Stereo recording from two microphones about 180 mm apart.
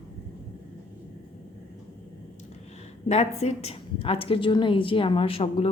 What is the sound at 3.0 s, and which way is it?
A woman's voice, 35° left (ahead or behind).